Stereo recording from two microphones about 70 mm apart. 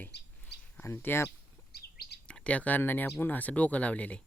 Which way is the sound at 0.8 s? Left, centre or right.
Left.